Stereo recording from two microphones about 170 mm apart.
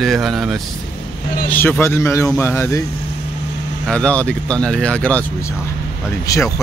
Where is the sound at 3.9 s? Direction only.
5° left (ahead or behind).